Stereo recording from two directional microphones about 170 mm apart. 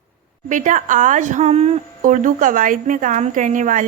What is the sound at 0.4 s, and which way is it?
A woman's voice, 50° right (ahead or behind).